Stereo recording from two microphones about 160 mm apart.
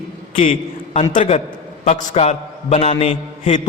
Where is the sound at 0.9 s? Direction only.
40° left (ahead or behind).